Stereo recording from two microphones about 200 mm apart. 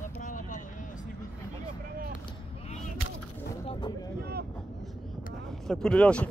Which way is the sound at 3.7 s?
20° left (ahead or behind).